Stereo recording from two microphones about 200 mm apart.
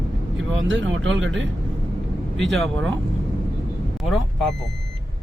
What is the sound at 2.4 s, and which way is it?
Speech, centre (ahead or behind).